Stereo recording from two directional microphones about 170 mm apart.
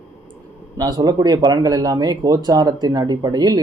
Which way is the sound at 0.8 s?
25° right (ahead or behind).